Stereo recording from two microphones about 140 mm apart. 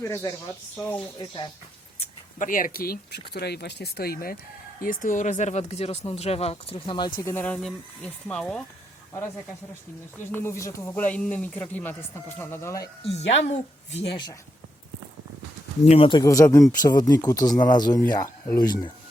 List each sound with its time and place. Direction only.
0.0 s speech: 20° left (ahead or behind)
1.2 s speech: 35° left (ahead or behind)
2.4 s speech: 75° left (ahead or behind); by 3.0 s 90° left
4.0 s speech: 90° left
4.8 s speech: 75° left (ahead or behind); by 7.4 s 20° left (ahead or behind)
7.4 s speech: 5° left (ahead or behind)
10.3 s speech: 20° left (ahead or behind)
13.0 s speech: 50° left (ahead or behind)
14.1 s speech: 30° left (ahead or behind)
15.8 s speech: 45° left (ahead or behind); by 18.9 s 30° left (ahead or behind)